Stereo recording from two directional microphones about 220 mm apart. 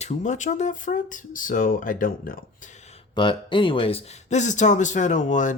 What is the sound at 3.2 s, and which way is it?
Speech, 20° left (ahead or behind).